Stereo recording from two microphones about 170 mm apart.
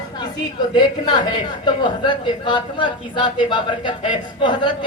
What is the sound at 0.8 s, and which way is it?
A woman's voice, 25° left (ahead or behind).